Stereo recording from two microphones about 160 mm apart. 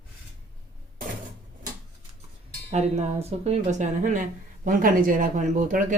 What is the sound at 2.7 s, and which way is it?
Speech, 40° right (ahead or behind).